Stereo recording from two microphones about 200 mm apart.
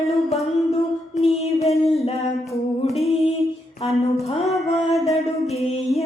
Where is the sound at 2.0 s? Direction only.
30° left (ahead or behind).